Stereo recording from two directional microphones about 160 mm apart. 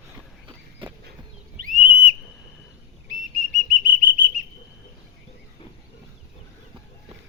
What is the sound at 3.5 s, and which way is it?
Whistle, 60° right (ahead or behind).